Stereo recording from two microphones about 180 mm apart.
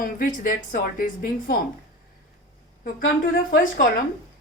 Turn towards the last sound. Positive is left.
turn(degrees=50)  # may be behind; listen again after turning